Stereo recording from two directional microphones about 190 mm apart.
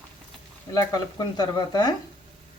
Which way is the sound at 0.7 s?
20° left (ahead or behind).